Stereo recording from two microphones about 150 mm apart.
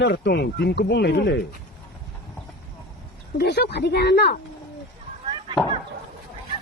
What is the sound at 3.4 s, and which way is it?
Speech, 90° left.